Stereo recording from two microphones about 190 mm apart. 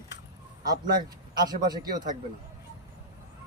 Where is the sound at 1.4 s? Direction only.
20° right (ahead or behind).